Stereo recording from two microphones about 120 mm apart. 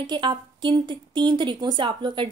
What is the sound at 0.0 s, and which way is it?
A woman's voice, 40° right (ahead or behind).